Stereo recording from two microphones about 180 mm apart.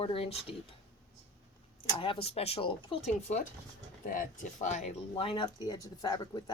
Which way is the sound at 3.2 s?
45° left (ahead or behind).